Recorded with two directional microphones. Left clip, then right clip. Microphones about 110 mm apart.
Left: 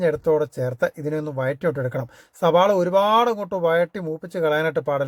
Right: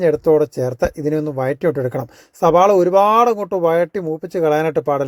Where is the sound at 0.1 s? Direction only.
30° right (ahead or behind).